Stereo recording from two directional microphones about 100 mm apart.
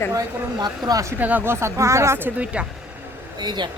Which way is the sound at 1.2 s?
20° right (ahead or behind).